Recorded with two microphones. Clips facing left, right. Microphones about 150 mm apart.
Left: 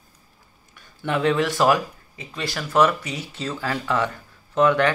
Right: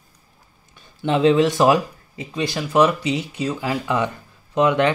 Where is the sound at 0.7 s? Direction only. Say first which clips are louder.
Right 5 dB; 20° right (ahead or behind).